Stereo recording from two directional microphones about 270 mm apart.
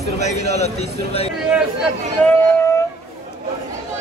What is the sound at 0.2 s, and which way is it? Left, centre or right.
A man's voice, left.